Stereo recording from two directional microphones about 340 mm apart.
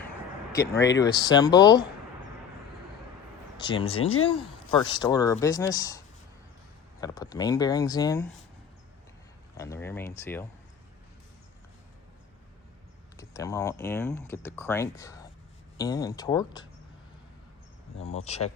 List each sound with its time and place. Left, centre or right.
0.9 s speech: centre
3.6 s speech: centre
7.0 s speech: centre
9.6 s speech: centre
13.1 s speech: centre
17.9 s speech: centre